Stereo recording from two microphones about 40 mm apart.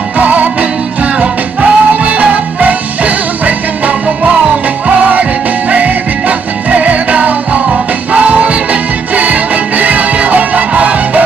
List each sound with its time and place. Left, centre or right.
0.2 s music: right
5.7 s music: right